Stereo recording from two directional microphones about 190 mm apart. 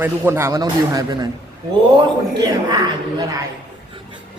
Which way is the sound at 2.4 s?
20° right (ahead or behind).